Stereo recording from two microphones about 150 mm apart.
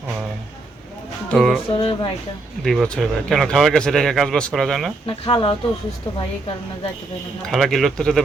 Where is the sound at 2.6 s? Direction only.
5° left (ahead or behind).